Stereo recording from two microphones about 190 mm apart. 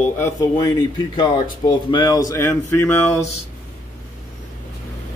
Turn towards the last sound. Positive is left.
turn(degrees=15)  # may be behind; listen again after turning